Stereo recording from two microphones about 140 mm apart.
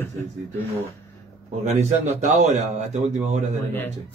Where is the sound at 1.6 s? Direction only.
55° right (ahead or behind).